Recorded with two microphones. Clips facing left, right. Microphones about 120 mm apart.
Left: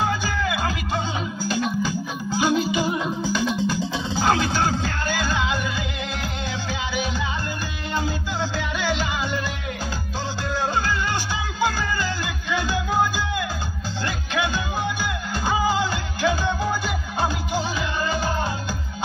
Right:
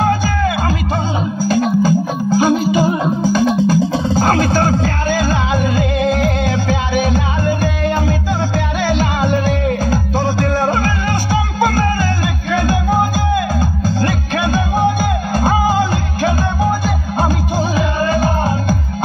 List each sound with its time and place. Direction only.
0.0 s music: 40° right (ahead or behind)